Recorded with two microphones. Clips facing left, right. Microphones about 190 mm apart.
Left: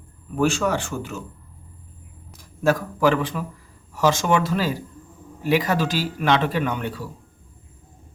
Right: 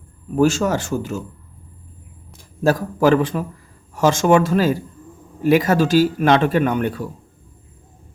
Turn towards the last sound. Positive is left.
turn(degrees=-50)  # may be behind; listen again after turning